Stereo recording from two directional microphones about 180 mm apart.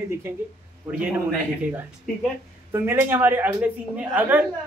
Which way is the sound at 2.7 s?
15° right (ahead or behind).